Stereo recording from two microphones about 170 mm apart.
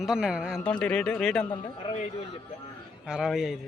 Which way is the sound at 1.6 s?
35° left (ahead or behind).